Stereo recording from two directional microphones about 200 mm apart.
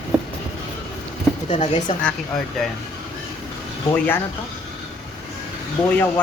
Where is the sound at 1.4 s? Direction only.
30° left (ahead or behind).